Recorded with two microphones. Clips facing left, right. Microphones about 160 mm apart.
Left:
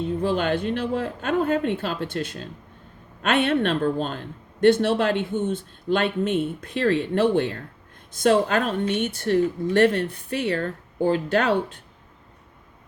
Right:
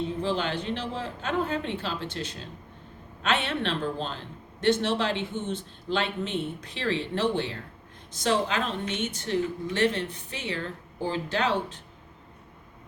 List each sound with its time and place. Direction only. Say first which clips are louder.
0.2 s a woman's voice: left 6 dB; 50° left (ahead or behind)